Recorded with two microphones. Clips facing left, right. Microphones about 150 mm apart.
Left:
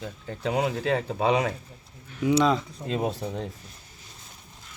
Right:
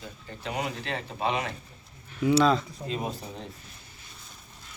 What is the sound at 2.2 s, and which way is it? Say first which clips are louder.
Speech: even; 15° left (ahead or behind).